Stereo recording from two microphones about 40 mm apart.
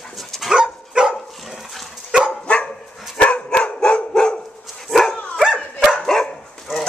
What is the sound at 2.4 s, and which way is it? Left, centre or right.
Dog, left.